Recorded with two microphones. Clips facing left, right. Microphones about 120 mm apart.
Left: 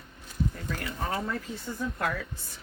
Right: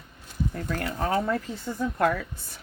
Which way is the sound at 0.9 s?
55° right (ahead or behind).